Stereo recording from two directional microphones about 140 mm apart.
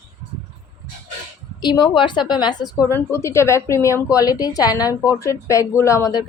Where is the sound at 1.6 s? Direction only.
35° left (ahead or behind).